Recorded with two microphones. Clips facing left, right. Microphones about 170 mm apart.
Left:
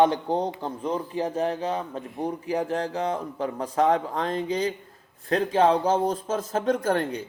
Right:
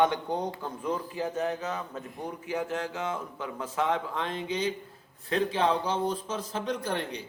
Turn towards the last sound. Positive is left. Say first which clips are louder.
# left 7 dB
turn(degrees=50)  # may be behind; listen again after turning